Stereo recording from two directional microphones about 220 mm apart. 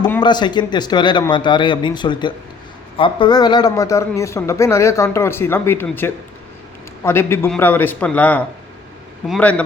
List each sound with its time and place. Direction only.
0.0 s a man's voice: 20° left (ahead or behind)